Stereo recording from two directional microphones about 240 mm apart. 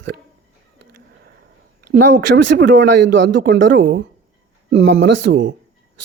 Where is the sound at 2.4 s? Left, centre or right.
Right.